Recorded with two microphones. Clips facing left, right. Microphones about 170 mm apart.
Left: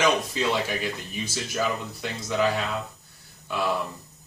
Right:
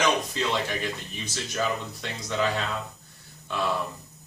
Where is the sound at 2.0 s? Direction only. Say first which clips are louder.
Left 3 dB; 5° left (ahead or behind).